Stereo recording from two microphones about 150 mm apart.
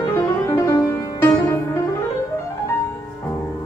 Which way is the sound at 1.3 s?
20° left (ahead or behind).